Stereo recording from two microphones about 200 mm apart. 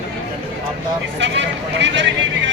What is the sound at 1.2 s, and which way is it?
Speech, 65° right (ahead or behind).